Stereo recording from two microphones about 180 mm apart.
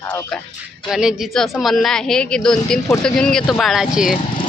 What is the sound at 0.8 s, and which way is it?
A woman's voice, 5° right (ahead or behind).